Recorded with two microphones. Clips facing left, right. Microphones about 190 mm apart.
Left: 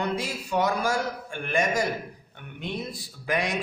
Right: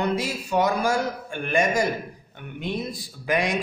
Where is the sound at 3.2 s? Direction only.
15° right (ahead or behind).